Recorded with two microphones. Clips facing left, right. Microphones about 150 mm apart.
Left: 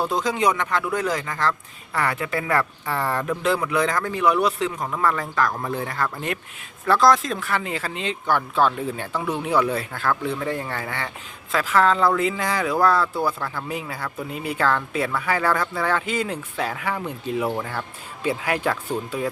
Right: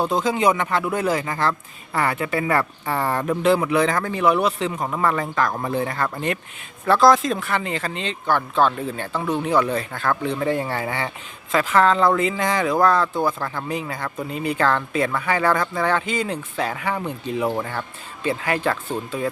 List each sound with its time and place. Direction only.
0.1 s speech: centre (ahead or behind)
2.0 s speech: centre (ahead or behind)
10.7 s speech: 20° right (ahead or behind)
11.5 s speech: centre (ahead or behind)